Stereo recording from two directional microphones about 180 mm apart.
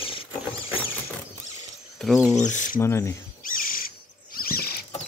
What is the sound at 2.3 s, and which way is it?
Speech, 45° left (ahead or behind).